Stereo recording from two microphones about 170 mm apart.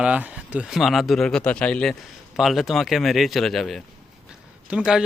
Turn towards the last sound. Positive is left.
turn(degrees=-5)  # may be behind; listen again after turning